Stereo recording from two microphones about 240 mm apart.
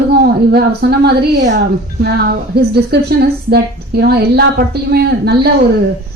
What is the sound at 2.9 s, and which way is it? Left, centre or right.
A woman's voice, right.